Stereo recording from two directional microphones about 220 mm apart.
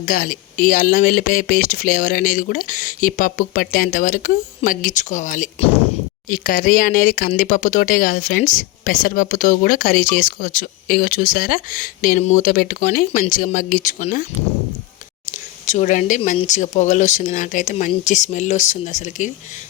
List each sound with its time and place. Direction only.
0.0 s speech: 40° left (ahead or behind)
15.3 s speech: 35° left (ahead or behind)